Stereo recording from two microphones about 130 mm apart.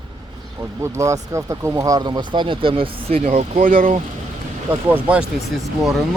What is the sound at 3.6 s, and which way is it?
Speech, 90° right.